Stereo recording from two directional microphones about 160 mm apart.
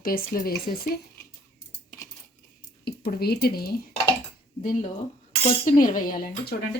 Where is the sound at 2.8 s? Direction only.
75° left (ahead or behind).